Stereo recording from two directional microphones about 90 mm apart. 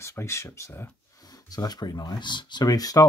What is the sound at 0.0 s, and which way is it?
Speech, 30° left (ahead or behind).